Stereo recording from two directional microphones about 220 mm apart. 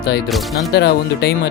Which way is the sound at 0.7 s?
50° left (ahead or behind).